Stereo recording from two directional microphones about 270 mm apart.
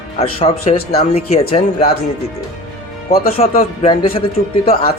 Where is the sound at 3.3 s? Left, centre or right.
Left.